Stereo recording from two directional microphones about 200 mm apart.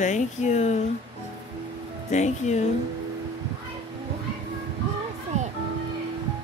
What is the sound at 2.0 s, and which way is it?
Speech, 35° left (ahead or behind).